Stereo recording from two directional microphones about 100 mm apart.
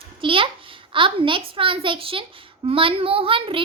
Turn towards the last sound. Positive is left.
turn(degrees=-60)  # may be behind; listen again after turning